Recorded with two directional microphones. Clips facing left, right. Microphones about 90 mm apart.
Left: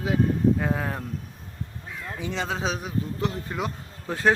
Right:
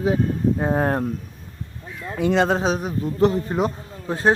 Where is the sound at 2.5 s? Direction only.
40° right (ahead or behind).